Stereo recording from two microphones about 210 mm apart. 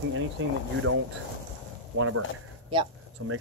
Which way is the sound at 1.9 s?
90° right.